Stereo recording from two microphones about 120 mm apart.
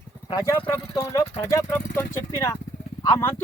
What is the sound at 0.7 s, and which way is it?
Speech, 25° left (ahead or behind).